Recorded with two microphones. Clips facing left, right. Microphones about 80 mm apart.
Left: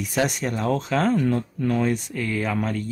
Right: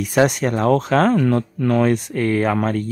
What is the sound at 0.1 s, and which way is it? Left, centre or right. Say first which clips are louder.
Speech: right 8 dB; right.